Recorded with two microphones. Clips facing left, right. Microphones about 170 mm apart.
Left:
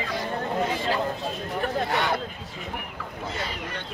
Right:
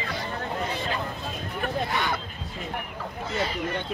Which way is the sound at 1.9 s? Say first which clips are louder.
Left 3 dB; 70° left (ahead or behind).